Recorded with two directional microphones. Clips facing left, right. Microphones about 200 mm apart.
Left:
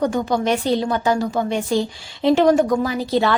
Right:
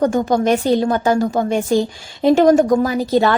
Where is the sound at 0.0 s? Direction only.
45° right (ahead or behind).